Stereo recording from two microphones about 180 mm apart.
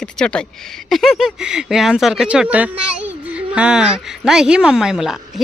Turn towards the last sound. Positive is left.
turn(degrees=-5)  # may be behind; listen again after turning